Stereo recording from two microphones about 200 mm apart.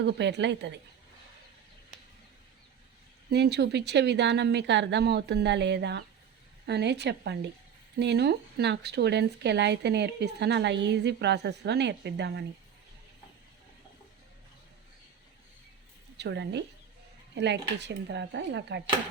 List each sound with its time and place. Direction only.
0.0 s speech: 60° right (ahead or behind)
3.2 s speech: 55° right (ahead or behind)
16.1 s speech: 60° right (ahead or behind)